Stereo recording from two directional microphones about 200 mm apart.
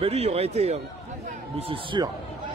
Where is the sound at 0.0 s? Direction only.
30° right (ahead or behind).